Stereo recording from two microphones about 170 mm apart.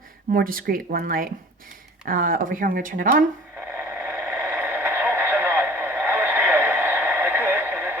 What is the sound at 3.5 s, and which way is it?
Radio, 10° right (ahead or behind).